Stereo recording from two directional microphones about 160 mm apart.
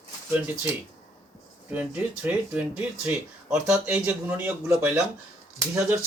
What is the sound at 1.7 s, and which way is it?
Speech, 10° right (ahead or behind).